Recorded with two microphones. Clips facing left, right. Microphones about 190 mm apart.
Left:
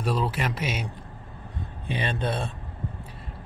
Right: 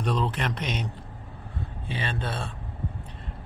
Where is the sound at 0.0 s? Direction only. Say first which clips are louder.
Left 1 dB; 5° left (ahead or behind).